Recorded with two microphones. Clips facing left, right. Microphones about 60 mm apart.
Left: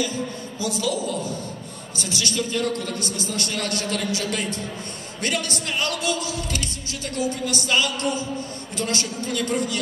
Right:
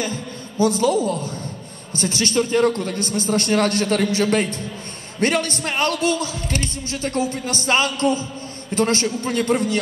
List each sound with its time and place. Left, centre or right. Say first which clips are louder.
0.0 s a man's voice: even; right